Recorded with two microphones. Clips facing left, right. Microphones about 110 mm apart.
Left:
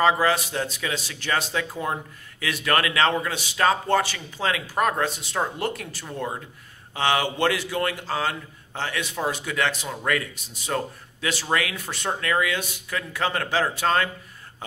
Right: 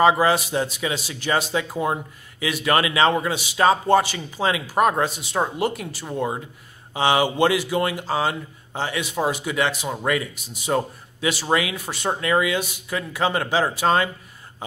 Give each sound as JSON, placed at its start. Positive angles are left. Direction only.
{"t": 0.0, "sound": "speech", "side_deg": -15}